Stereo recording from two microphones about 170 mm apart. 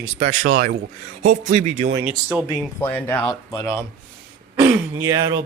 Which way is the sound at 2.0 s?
10° right (ahead or behind).